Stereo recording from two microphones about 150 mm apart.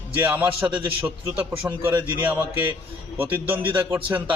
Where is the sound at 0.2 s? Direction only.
15° right (ahead or behind).